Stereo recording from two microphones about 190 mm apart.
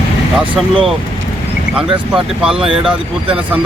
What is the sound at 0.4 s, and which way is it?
Speech, 25° right (ahead or behind).